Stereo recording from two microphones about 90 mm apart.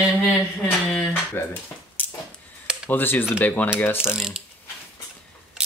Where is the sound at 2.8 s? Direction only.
20° left (ahead or behind).